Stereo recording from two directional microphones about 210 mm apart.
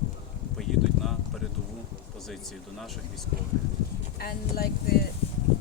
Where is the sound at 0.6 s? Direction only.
Centre (ahead or behind).